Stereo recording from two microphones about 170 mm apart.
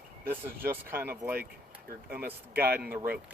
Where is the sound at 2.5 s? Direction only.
65° right (ahead or behind).